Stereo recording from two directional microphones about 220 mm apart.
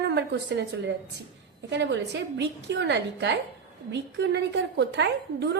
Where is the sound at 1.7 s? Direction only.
55° right (ahead or behind).